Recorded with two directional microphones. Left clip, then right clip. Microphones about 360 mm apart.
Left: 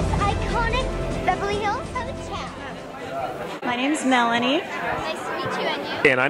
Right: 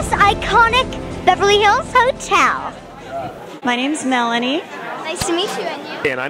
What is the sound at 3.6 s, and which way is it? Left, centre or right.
A woman's voice, centre.